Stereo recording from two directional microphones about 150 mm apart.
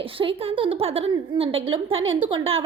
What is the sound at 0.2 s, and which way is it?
A woman's voice, 35° right (ahead or behind).